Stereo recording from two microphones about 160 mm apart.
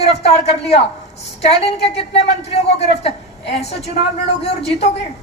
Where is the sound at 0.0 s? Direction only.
40° left (ahead or behind).